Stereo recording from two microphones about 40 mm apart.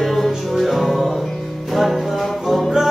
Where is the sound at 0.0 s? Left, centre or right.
Centre.